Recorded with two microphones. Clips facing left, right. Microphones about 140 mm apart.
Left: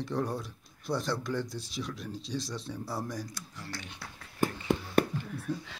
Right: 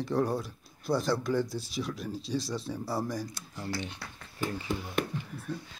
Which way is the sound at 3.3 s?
25° right (ahead or behind).